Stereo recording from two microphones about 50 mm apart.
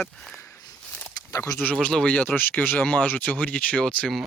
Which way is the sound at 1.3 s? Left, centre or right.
Left.